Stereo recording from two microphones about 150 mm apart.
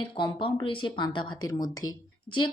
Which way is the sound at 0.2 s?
35° left (ahead or behind).